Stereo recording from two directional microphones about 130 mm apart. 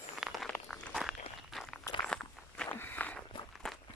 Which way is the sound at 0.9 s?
Centre (ahead or behind).